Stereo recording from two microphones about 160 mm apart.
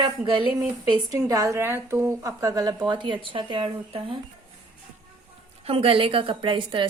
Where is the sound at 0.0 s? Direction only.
30° right (ahead or behind).